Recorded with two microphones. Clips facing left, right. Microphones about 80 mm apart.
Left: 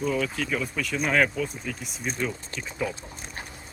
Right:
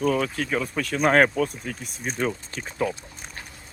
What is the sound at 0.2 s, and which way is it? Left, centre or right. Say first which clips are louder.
Speech: right 2 dB; right.